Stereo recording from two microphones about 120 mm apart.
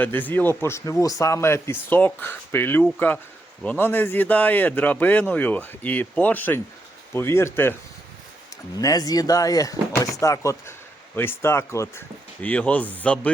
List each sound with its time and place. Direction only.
0.0 s speech: 15° left (ahead or behind)
8.8 s speech: 30° left (ahead or behind); by 13.3 s 10° left (ahead or behind)